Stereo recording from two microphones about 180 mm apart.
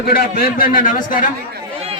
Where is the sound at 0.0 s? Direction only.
55° left (ahead or behind).